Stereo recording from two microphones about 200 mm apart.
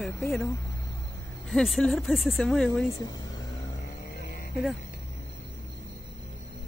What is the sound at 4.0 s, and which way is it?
Music, 50° left (ahead or behind).